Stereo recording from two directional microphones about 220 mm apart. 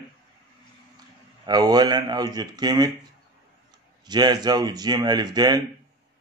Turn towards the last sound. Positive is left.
turn(degrees=-20)  # may be behind; listen again after turning